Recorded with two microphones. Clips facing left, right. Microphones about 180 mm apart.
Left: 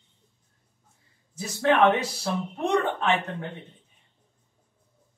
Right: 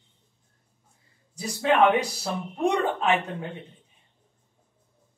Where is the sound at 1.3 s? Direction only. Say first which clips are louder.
Even; 15° right (ahead or behind).